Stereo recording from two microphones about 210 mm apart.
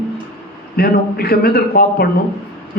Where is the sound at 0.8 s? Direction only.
45° left (ahead or behind).